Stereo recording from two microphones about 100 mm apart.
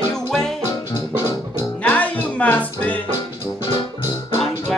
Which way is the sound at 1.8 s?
15° left (ahead or behind).